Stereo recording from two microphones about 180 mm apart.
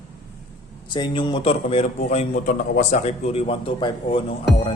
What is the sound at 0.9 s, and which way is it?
Speech, 25° left (ahead or behind).